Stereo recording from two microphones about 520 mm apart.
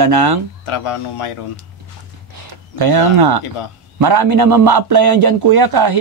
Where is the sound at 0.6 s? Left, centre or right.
Left.